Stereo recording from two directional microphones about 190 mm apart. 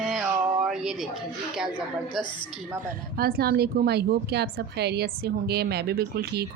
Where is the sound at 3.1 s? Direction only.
55° right (ahead or behind).